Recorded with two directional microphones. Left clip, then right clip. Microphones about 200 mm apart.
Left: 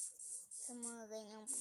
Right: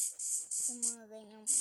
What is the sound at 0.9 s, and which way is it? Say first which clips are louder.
Music: left 1 dB; 10° right (ahead or behind).